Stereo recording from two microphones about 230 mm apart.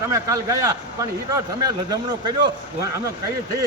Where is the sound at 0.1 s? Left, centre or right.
Centre.